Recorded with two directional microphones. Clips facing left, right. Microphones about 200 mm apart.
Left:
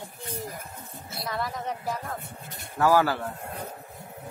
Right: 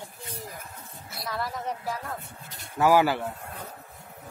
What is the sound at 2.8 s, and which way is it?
Speech, 15° right (ahead or behind).